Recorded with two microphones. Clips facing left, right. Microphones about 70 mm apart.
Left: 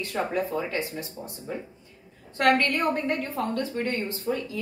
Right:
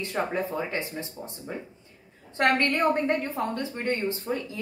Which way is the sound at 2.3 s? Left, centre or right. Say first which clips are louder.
Left 1 dB; right.